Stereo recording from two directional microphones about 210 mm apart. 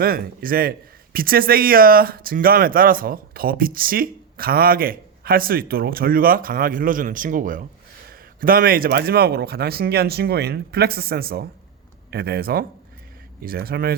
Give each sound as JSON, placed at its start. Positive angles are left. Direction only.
{"t": 0.0, "sound": "speech", "side_deg": -45}